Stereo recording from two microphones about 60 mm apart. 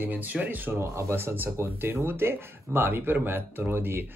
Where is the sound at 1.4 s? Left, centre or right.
Right.